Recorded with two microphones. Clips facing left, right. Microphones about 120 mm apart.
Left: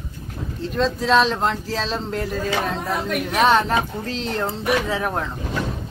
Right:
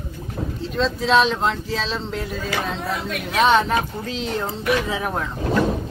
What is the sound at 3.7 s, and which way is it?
Speech, 35° left (ahead or behind).